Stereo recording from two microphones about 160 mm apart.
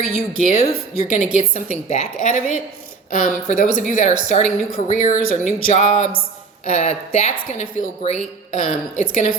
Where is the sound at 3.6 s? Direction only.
55° left (ahead or behind).